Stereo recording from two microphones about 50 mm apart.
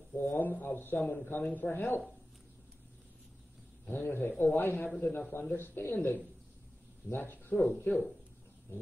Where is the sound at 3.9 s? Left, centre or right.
Left.